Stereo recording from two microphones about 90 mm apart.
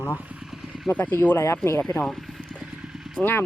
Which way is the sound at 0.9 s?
20° left (ahead or behind).